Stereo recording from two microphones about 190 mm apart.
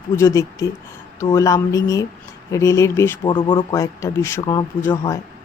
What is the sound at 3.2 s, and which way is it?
A woman's voice, 25° left (ahead or behind).